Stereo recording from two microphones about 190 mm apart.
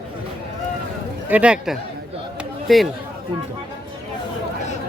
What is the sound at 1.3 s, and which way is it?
Speech, 5° right (ahead or behind).